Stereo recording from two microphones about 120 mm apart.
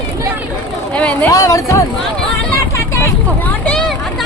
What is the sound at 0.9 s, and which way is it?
Speech, 10° left (ahead or behind).